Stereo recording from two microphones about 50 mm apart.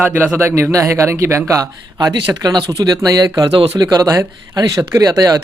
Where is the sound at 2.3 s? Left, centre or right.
Right.